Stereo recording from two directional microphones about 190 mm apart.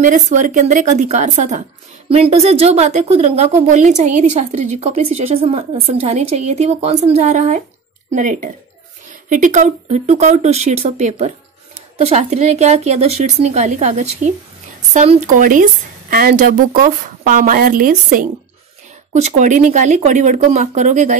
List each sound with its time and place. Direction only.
0.0 s a woman's voice: 40° right (ahead or behind)
19.2 s a woman's voice: 40° right (ahead or behind)